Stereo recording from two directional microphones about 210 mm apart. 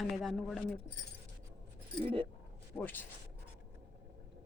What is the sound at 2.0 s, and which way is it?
Speech, 25° right (ahead or behind).